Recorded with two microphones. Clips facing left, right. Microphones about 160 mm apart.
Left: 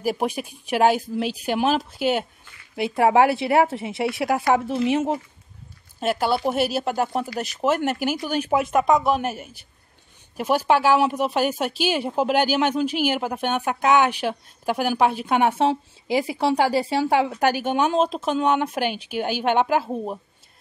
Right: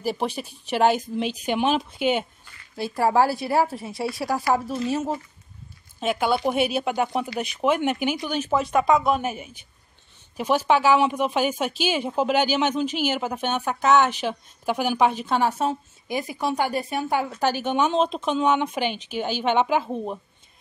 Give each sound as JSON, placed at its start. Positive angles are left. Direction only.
{"t": 0.0, "sound": "speech", "side_deg": 10}
{"t": 3.0, "sound": "speech", "side_deg": 65}
{"t": 3.6, "sound": "speech", "side_deg": 25}
{"t": 5.9, "sound": "speech", "side_deg": 5}
{"t": 10.3, "sound": "speech", "side_deg": 10}
{"t": 16.3, "sound": "speech", "side_deg": 75}
{"t": 17.3, "sound": "speech", "side_deg": 15}